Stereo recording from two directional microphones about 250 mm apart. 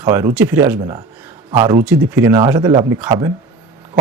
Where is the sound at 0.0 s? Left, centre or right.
Centre.